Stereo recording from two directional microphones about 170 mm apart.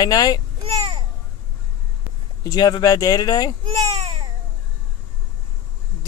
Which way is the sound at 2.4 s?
25° left (ahead or behind).